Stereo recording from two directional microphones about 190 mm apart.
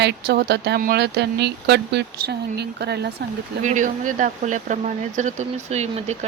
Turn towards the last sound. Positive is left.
turn(degrees=-35)  # may be behind; listen again after turning